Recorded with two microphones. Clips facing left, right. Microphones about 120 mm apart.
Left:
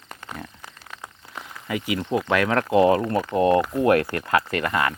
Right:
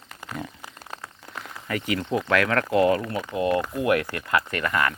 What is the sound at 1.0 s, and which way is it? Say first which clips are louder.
Speech: left 1 dB; 10° left (ahead or behind).